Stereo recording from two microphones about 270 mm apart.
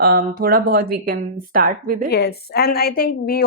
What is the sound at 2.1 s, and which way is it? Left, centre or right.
A woman's voice, left.